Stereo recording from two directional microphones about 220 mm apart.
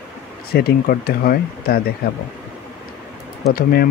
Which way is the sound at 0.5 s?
45° left (ahead or behind).